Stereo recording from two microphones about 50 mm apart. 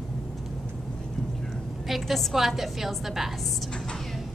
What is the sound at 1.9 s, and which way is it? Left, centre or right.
A woman's voice, centre.